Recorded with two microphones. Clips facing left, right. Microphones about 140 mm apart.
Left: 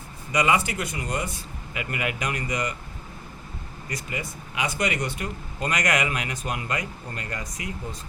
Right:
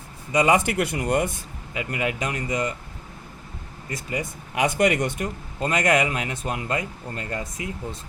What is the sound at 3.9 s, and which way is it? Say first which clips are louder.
Speech: right 4 dB; 40° right (ahead or behind).